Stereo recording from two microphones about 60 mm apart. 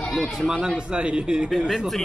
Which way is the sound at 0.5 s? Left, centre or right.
Centre.